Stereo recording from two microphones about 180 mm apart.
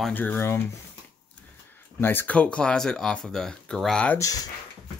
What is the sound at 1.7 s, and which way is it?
Speech, 10° left (ahead or behind).